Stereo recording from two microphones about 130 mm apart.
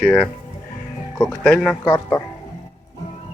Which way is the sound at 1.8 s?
15° left (ahead or behind).